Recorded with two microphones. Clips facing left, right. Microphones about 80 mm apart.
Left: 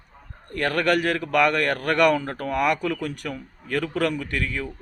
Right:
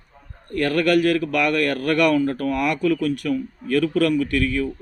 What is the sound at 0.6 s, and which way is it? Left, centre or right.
Speech, left.